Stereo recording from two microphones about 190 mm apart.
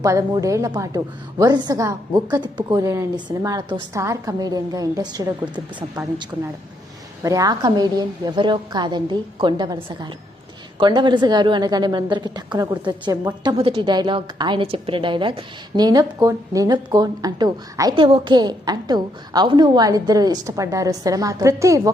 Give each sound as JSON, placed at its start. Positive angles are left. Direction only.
{"t": 0.0, "sound": "a woman's voice", "side_deg": -15}
{"t": 5.5, "sound": "speech", "side_deg": -5}
{"t": 7.2, "sound": "a woman's voice", "side_deg": -15}